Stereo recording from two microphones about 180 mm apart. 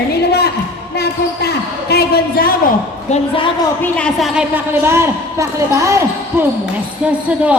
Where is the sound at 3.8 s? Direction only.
5° left (ahead or behind).